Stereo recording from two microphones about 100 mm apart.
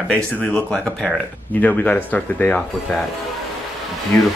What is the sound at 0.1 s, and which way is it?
Speech, 15° left (ahead or behind).